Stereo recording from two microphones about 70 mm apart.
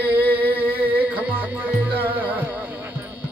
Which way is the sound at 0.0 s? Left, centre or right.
Right.